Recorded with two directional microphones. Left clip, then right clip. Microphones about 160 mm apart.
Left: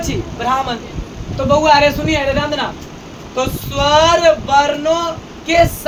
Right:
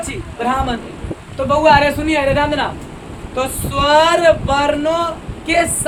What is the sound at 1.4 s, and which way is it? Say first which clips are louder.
Speech: left 1 dB; 15° right (ahead or behind).